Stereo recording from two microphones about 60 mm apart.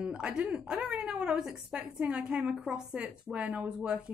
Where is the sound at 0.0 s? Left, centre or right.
Centre.